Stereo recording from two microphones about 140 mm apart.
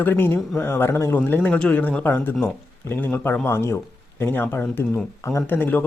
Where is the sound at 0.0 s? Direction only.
15° left (ahead or behind).